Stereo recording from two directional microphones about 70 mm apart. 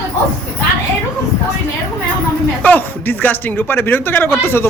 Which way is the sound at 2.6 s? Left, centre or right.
Left.